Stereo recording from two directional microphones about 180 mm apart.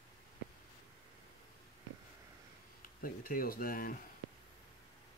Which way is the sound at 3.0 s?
55° left (ahead or behind).